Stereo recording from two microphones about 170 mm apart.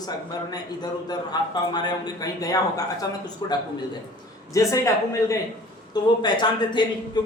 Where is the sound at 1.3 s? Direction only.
25° left (ahead or behind).